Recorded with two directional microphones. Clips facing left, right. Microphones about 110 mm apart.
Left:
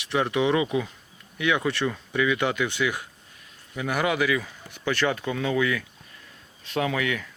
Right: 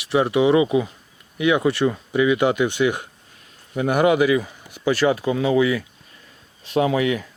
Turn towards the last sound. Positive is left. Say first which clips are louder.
# right 7 dB
turn(degrees=-30)  # may be behind; listen again after turning